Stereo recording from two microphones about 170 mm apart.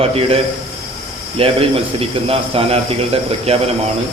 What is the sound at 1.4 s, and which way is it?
A man's voice, 35° right (ahead or behind).